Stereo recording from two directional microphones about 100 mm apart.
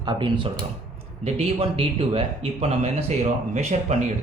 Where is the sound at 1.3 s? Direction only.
85° right.